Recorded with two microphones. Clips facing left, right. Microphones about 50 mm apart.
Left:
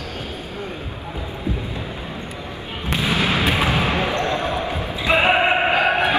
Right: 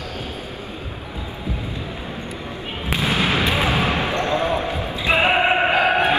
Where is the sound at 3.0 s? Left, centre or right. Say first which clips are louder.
Even; right.